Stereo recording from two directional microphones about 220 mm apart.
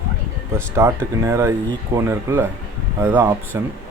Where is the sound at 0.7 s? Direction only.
10° right (ahead or behind).